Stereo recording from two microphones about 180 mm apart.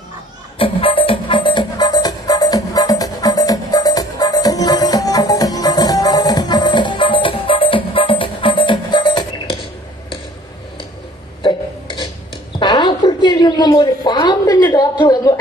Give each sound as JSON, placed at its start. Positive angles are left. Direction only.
{"t": 0.6, "sound": "music", "side_deg": 30}
{"t": 11.4, "sound": "burping", "side_deg": 25}
{"t": 12.5, "sound": "a sound", "side_deg": 25}